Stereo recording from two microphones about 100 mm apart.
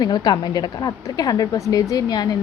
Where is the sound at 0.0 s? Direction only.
45° left (ahead or behind).